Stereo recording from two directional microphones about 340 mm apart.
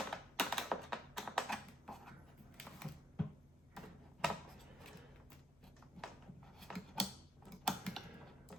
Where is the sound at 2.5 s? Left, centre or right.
Centre.